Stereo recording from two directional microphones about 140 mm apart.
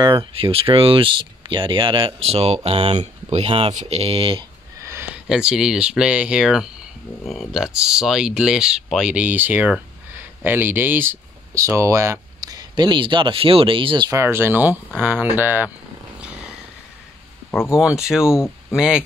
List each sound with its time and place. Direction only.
0.0 s speech: 35° right (ahead or behind)
4.8 s speech: 15° right (ahead or behind); by 14.1 s 35° right (ahead or behind)
14.1 s speech: 20° right (ahead or behind)
17.5 s speech: 20° left (ahead or behind)
17.7 s speech: 5° right (ahead or behind)